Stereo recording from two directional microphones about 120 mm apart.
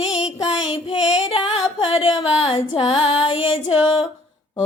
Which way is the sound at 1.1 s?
50° left (ahead or behind).